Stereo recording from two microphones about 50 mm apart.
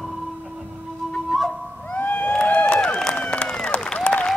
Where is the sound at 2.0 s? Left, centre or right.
Left.